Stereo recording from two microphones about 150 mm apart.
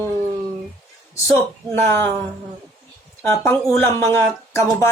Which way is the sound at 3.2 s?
15° left (ahead or behind).